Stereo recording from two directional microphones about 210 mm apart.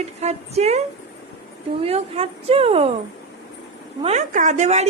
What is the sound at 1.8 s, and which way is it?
A woman's voice, 30° right (ahead or behind).